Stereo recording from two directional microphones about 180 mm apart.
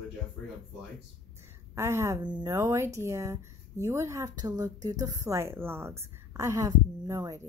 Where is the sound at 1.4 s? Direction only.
15° right (ahead or behind).